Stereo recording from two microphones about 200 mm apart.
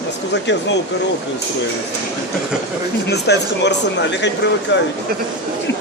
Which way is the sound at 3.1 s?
60° left (ahead or behind).